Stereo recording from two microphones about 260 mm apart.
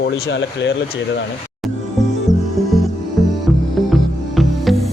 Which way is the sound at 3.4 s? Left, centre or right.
Centre.